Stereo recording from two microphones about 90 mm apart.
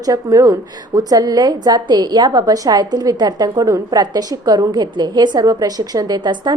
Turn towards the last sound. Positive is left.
turn(degrees=-55)  # may be behind; listen again after turning